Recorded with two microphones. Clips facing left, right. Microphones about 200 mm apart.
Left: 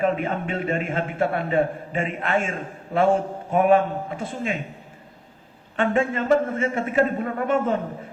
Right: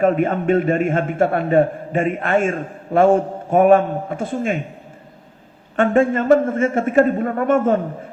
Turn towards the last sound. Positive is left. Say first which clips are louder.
# right 6 dB
turn(degrees=-50)  # may be behind; listen again after turning